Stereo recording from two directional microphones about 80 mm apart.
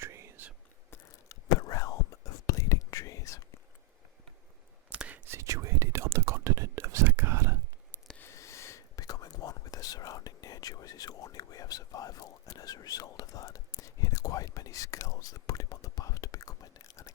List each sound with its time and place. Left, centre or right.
0.0 s whispering: right
0.9 s whispering: left
4.9 s whispering: centre
5.3 s whispering: right
8.2 s whispering: left